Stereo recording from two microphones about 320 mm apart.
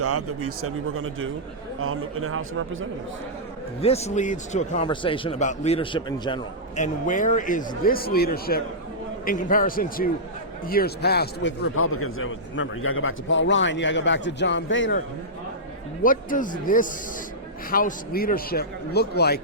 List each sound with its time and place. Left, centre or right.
0.0 s speech: right
3.8 s a man's voice: centre
16.0 s a man's voice: left